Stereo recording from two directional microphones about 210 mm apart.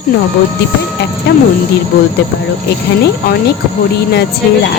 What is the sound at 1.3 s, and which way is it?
Speech, 50° left (ahead or behind).